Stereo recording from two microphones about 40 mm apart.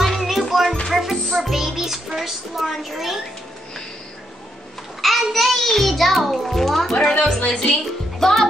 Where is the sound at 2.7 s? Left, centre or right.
Centre.